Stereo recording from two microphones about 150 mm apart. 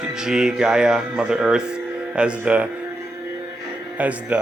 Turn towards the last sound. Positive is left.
turn(degrees=-10)  # may be behind; listen again after turning